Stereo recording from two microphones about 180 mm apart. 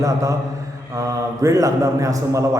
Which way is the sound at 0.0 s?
20° right (ahead or behind).